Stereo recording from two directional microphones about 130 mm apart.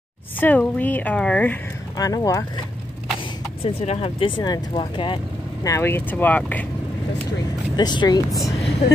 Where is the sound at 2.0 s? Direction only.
30° left (ahead or behind).